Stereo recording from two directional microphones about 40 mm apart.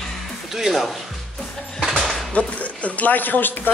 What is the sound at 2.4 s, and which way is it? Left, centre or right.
Speech, left.